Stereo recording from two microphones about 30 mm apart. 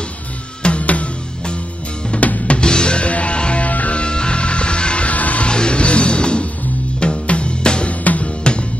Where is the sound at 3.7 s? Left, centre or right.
Left.